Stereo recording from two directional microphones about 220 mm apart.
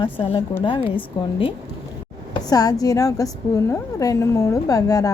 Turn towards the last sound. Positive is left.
turn(degrees=15)  # may be behind; listen again after turning